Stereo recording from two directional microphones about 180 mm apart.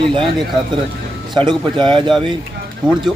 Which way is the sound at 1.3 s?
25° right (ahead or behind).